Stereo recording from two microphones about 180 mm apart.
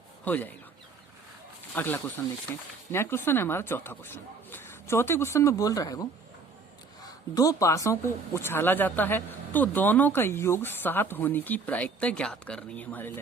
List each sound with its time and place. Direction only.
0.3 s speech: 10° left (ahead or behind)
1.7 s speech: 10° left (ahead or behind)